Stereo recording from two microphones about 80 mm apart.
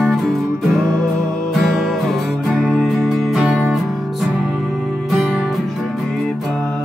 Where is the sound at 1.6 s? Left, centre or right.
Centre.